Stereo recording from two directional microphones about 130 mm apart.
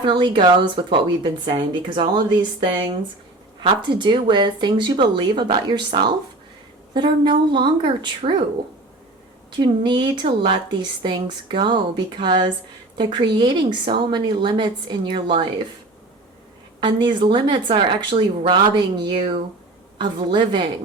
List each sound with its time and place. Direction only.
0.0 s a woman's voice: 35° right (ahead or behind)
9.5 s a woman's voice: 35° right (ahead or behind)
16.8 s a woman's voice: 40° right (ahead or behind)